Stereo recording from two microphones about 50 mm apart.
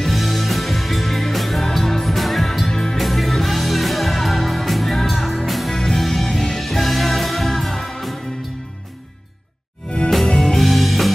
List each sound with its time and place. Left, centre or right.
0.0 s music: centre
9.8 s music: centre
10.1 s music: centre